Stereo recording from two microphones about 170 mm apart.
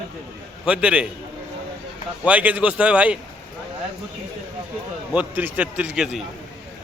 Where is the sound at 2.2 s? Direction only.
10° right (ahead or behind).